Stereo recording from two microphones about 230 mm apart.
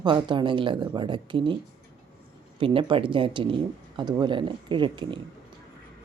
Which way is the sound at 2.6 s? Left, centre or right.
Right.